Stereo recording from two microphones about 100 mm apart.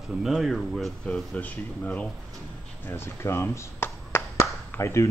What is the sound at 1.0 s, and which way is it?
Speech, 10° left (ahead or behind).